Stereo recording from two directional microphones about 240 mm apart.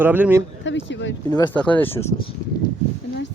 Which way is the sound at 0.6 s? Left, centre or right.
Left.